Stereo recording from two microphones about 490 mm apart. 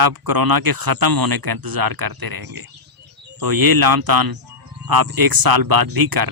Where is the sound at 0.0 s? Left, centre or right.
Right.